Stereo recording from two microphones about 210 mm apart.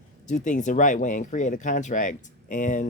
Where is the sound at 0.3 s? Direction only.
35° left (ahead or behind).